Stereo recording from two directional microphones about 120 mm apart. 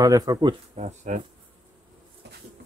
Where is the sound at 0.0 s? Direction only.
30° right (ahead or behind).